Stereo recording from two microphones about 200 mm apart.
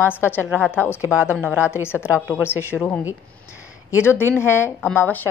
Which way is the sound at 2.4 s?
10° left (ahead or behind).